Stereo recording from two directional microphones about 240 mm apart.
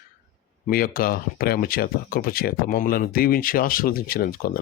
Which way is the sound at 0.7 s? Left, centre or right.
Left.